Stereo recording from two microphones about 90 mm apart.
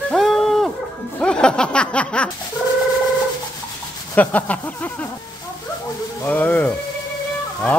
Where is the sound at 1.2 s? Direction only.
10° left (ahead or behind).